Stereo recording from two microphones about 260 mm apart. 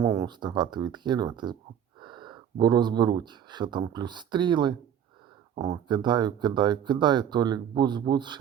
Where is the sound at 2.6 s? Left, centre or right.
Centre.